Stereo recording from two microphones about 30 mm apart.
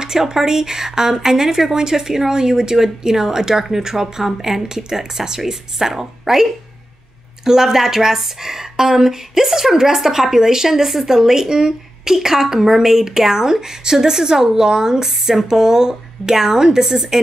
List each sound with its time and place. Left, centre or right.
0.0 s speech: centre